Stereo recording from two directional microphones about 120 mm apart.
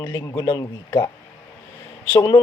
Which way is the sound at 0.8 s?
20° left (ahead or behind).